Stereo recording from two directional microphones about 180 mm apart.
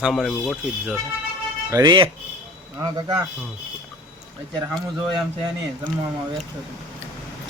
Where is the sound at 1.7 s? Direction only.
20° right (ahead or behind).